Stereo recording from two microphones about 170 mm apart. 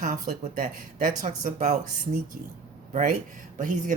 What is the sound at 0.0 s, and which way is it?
Speech, 55° right (ahead or behind).